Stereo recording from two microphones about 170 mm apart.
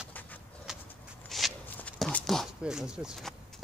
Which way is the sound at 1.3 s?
Centre (ahead or behind).